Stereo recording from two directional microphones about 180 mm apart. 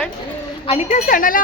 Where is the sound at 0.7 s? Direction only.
35° left (ahead or behind).